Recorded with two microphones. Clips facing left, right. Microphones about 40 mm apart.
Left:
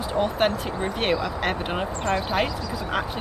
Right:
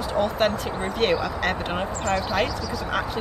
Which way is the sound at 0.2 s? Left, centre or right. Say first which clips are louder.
Even; centre.